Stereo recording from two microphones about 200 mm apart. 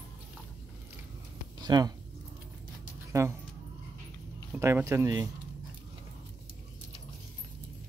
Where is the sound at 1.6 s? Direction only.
20° right (ahead or behind).